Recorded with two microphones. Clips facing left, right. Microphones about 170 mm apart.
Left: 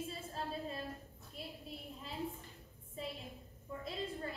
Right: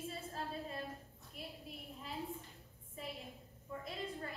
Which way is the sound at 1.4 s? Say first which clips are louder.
Left 1 dB; 30° left (ahead or behind).